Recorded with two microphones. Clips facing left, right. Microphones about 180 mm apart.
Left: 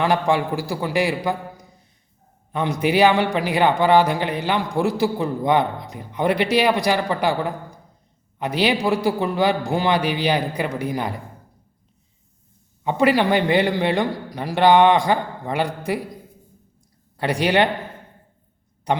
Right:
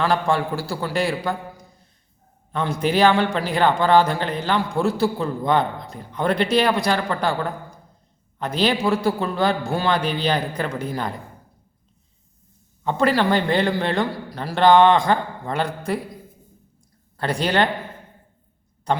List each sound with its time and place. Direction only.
0.0 s a man's voice: 15° left (ahead or behind)
12.8 s a man's voice: 15° left (ahead or behind)
17.2 s a man's voice: 15° left (ahead or behind)
18.9 s a man's voice: 15° left (ahead or behind)